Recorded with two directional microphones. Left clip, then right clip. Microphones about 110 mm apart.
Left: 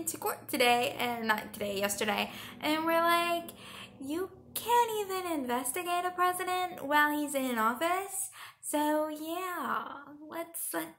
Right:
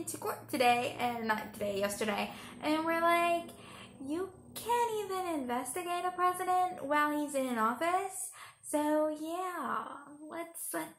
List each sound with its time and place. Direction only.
0.0 s a woman's voice: 20° left (ahead or behind)